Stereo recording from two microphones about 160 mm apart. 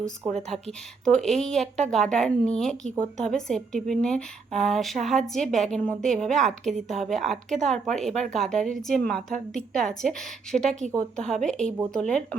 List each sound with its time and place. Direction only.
0.3 s a woman's voice: centre (ahead or behind)